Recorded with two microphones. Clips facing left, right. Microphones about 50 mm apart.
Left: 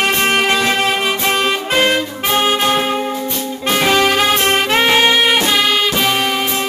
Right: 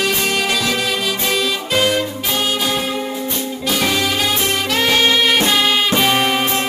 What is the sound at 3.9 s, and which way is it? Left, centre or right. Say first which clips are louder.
Music: left 5 dB; left.